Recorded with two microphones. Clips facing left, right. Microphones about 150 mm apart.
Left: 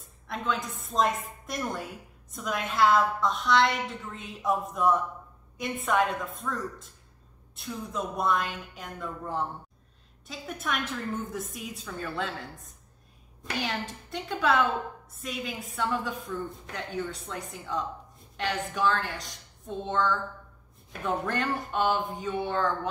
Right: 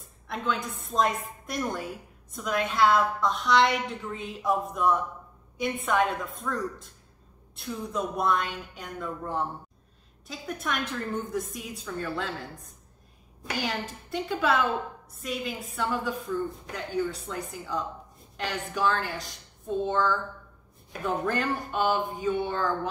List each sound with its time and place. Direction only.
0.0 s a woman's voice: centre (ahead or behind)
13.4 s a woman's voice: centre (ahead or behind)